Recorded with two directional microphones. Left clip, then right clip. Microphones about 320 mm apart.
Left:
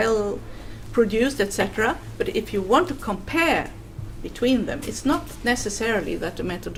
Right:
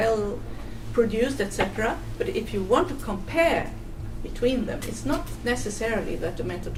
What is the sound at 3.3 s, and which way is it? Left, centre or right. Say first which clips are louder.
Speech: left 1 dB; left.